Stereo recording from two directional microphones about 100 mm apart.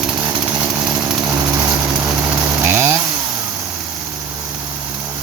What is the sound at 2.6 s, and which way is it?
Chainsaw, 25° right (ahead or behind).